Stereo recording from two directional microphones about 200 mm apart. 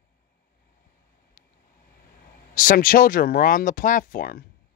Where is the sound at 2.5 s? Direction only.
45° left (ahead or behind).